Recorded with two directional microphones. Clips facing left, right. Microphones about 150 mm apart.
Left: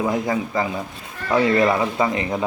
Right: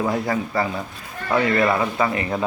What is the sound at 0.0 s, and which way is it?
Speech, 15° left (ahead or behind).